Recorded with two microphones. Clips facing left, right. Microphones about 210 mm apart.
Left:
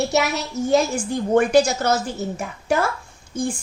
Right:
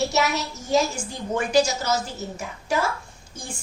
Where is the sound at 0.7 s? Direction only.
55° left (ahead or behind).